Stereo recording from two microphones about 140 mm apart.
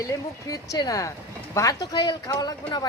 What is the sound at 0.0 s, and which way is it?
Speech, 25° left (ahead or behind).